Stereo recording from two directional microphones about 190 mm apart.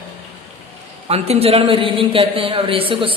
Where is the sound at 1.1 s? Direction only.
30° right (ahead or behind).